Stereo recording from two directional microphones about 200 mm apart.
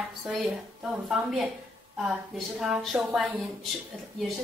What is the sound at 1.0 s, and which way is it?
A woman's voice, centre (ahead or behind).